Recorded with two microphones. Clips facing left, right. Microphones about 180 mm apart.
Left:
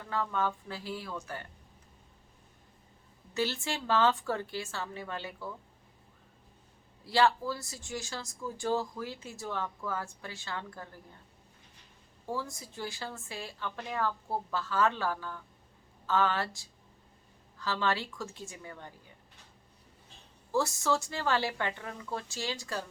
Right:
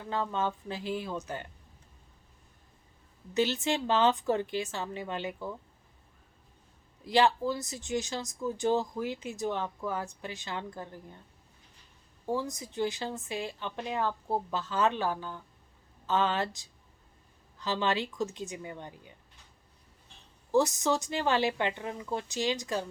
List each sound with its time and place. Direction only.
0.0 s speech: 20° right (ahead or behind)
3.3 s speech: 20° right (ahead or behind)
7.0 s speech: 20° right (ahead or behind)
12.2 s speech: 20° right (ahead or behind)
20.5 s speech: 20° right (ahead or behind)